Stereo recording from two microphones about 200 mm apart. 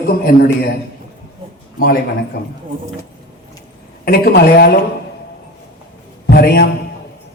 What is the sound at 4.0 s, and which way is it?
Speech, 50° left (ahead or behind).